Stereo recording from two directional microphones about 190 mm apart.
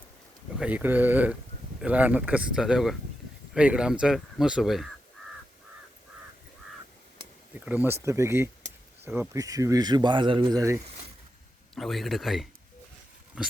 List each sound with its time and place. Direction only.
0.6 s speech: 10° right (ahead or behind)
7.5 s speech: 10° right (ahead or behind)
11.7 s speech: centre (ahead or behind)
13.4 s dog: 5° right (ahead or behind)